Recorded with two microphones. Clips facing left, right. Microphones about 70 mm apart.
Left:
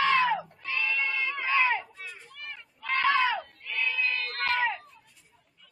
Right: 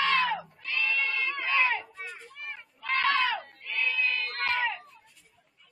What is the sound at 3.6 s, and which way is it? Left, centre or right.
Crowd, centre.